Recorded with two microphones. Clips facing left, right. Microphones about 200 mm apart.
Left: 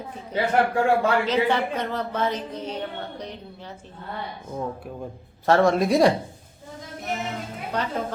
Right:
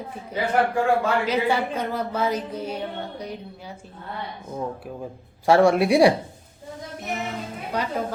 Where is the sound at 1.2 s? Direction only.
10° right (ahead or behind).